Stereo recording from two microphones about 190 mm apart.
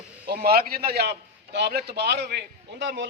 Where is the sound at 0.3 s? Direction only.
55° right (ahead or behind).